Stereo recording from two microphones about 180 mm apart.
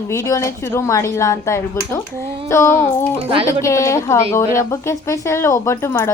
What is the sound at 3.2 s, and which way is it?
Speech, 30° right (ahead or behind).